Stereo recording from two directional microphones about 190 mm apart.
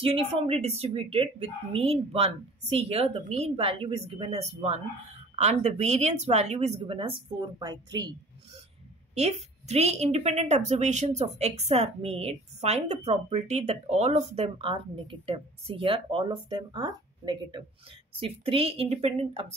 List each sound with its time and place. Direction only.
0.0 s a woman's voice: 30° right (ahead or behind)
9.1 s a woman's voice: 35° right (ahead or behind)